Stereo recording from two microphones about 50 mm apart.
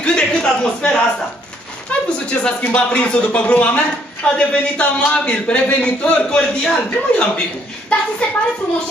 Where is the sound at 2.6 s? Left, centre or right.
Left.